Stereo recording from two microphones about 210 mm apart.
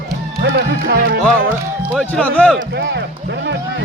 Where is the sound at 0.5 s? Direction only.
55° right (ahead or behind).